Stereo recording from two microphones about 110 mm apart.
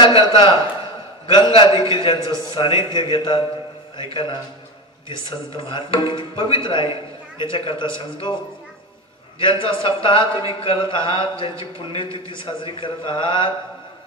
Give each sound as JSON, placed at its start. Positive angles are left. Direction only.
{"t": 0.0, "sound": "a man's voice", "side_deg": 45}
{"t": 9.4, "sound": "a man's voice", "side_deg": 50}